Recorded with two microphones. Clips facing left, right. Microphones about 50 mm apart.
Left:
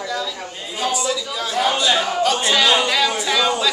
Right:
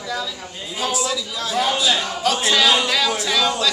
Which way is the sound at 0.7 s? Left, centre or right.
Centre.